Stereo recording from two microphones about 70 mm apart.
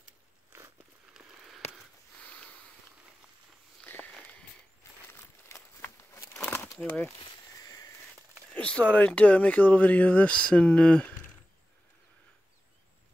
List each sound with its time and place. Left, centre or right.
1.1 s a sound: centre
2.2 s sniff: left
3.8 s walk: left
5.0 s a sound: left
6.1 s crumpling: left
6.9 s speech: centre
8.5 s speech: centre